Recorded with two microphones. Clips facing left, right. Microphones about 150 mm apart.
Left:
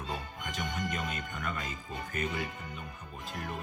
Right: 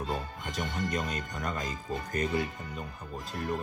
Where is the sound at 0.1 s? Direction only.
35° right (ahead or behind).